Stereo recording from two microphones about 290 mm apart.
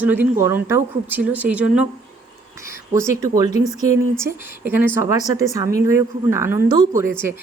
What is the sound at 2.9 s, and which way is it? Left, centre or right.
Speech, centre.